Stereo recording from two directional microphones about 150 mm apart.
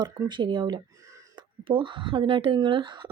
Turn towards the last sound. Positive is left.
turn(degrees=-30)  # may be behind; listen again after turning